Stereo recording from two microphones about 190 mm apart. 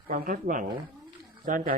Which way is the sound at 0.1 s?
45° right (ahead or behind).